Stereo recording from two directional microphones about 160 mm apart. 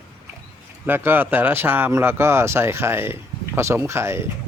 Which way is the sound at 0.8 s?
15° right (ahead or behind).